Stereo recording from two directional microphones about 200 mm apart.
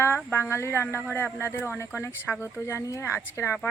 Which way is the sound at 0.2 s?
10° left (ahead or behind).